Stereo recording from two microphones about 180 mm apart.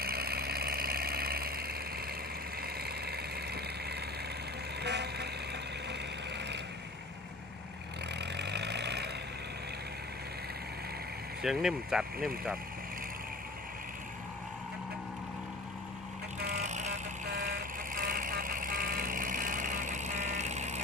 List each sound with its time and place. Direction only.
0.0 s vehicle: 60° right (ahead or behind)
8.2 s vehicle: 70° right (ahead or behind)
11.4 s speech: centre (ahead or behind)
16.5 s vehicle: 40° right (ahead or behind)
17.9 s vehicle: 50° right (ahead or behind)